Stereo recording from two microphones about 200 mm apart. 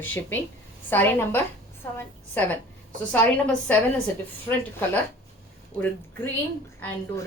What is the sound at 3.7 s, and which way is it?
Speech, 5° left (ahead or behind).